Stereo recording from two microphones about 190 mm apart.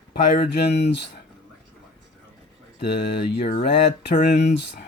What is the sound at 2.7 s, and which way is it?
Speech, 60° left (ahead or behind).